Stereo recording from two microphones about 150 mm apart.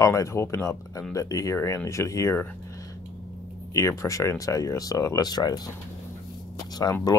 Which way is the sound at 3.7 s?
20° left (ahead or behind).